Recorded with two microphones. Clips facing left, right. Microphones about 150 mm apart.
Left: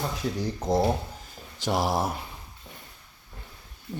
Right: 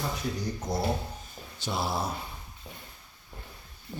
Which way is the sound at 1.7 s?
90° left.